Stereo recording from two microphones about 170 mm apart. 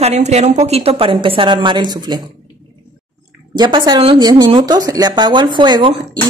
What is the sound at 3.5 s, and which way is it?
Speech, 25° right (ahead or behind).